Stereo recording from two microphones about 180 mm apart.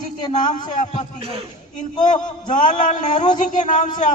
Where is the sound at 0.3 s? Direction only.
25° left (ahead or behind).